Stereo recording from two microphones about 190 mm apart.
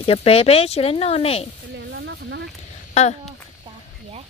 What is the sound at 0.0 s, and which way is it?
Speech, 30° left (ahead or behind).